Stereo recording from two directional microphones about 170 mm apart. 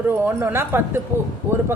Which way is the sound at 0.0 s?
10° right (ahead or behind).